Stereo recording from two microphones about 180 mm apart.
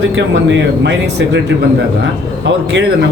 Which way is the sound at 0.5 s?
80° right.